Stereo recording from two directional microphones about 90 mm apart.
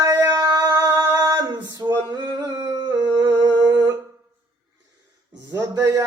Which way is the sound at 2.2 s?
40° right (ahead or behind).